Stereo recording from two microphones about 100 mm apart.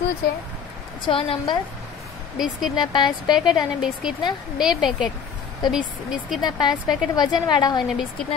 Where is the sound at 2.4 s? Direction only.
5° right (ahead or behind).